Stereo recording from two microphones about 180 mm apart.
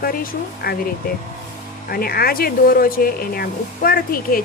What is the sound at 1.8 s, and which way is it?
Speech, 55° left (ahead or behind).